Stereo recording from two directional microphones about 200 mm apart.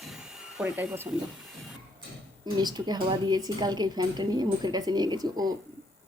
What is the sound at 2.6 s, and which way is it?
Speech, 20° right (ahead or behind).